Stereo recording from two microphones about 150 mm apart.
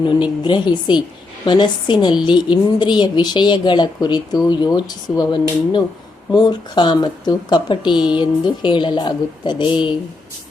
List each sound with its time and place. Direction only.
0.0 s speech: 35° left (ahead or behind)